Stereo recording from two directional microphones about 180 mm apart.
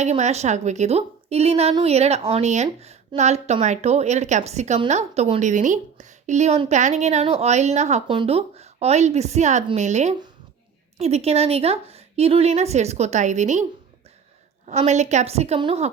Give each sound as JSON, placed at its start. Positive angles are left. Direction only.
{"t": 0.0, "sound": "a woman's voice", "side_deg": -40}
{"t": 14.7, "sound": "a woman's voice", "side_deg": -40}